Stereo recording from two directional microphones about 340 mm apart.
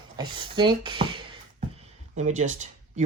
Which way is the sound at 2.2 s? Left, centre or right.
Right.